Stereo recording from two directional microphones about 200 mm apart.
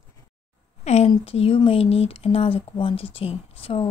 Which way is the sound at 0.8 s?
35° left (ahead or behind).